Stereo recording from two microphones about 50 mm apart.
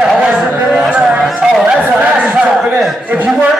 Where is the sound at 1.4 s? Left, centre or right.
Centre.